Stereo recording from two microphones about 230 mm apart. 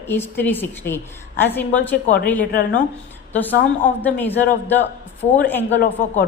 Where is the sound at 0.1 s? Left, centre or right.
Centre.